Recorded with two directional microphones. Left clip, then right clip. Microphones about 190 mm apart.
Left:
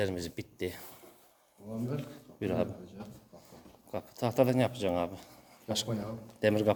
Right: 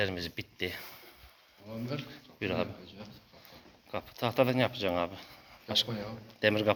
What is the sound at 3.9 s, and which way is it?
Speech, 15° left (ahead or behind).